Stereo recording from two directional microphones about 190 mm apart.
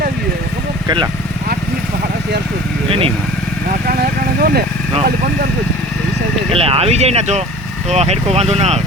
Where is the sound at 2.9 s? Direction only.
30° right (ahead or behind).